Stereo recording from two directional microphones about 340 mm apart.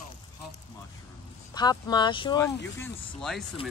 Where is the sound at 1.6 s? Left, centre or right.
Centre.